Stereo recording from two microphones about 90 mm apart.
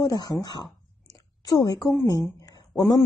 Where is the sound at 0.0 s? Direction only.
45° left (ahead or behind).